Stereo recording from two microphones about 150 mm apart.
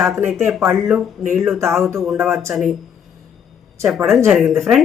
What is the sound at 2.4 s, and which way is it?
Speech, centre (ahead or behind).